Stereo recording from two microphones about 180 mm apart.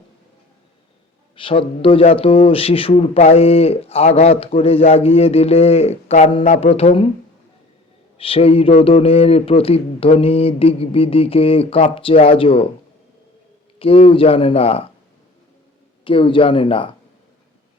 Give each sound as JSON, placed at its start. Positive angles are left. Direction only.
{"t": 1.4, "sound": "a man's voice", "side_deg": 30}
{"t": 8.2, "sound": "a man's voice", "side_deg": 30}
{"t": 13.7, "sound": "a man's voice", "side_deg": 30}
{"t": 16.0, "sound": "speech", "side_deg": 30}